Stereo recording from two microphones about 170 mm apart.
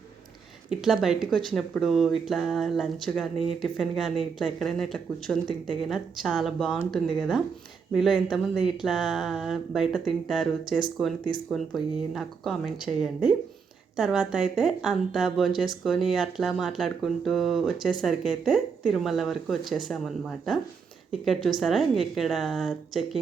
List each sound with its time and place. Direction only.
0.7 s a woman's voice: centre (ahead or behind)